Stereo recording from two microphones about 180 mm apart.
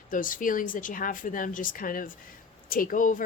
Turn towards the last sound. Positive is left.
turn(degrees=45)  # may be behind; listen again after turning